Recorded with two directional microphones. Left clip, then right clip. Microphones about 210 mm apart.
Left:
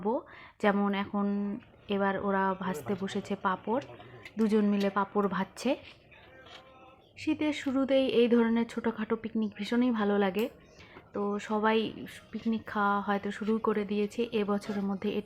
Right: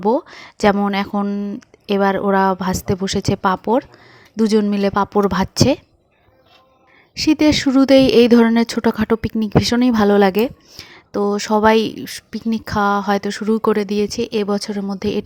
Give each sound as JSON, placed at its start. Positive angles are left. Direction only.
{"t": 0.0, "sound": "speech", "side_deg": -45}
{"t": 7.3, "sound": "speech", "side_deg": -50}